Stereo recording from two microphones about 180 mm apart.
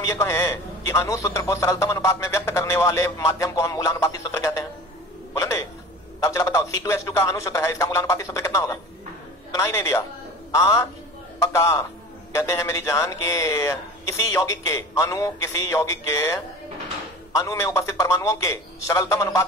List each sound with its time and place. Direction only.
0.0 s a man's voice: 15° left (ahead or behind)
6.2 s a man's voice: 15° left (ahead or behind)